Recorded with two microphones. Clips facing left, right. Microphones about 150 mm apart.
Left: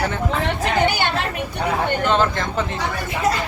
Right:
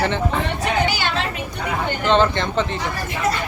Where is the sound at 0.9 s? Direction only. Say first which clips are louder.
Left 1 dB; 55° left (ahead or behind).